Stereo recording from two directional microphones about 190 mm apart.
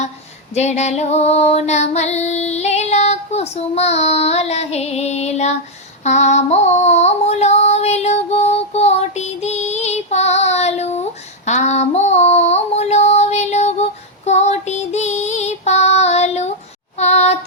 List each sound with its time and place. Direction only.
0.5 s female singing: 35° left (ahead or behind)
17.0 s child singing: 35° left (ahead or behind)